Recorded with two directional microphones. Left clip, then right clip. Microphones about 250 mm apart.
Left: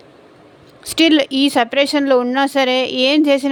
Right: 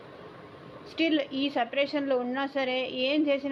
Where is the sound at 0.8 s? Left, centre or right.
Left.